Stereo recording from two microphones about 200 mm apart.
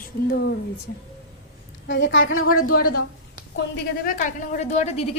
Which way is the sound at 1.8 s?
65° left (ahead or behind).